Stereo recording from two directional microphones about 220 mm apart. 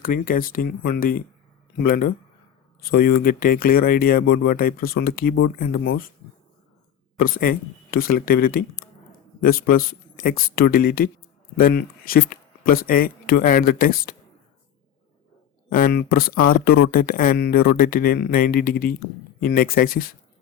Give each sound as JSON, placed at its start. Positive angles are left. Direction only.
{"t": 0.0, "sound": "speech", "side_deg": 40}
{"t": 7.2, "sound": "speech", "side_deg": 40}
{"t": 15.7, "sound": "speech", "side_deg": 45}